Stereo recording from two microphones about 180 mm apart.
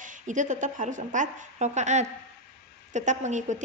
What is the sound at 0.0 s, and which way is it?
A woman's voice, 45° right (ahead or behind).